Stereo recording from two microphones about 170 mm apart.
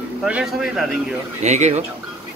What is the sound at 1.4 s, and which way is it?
Speech, 40° right (ahead or behind).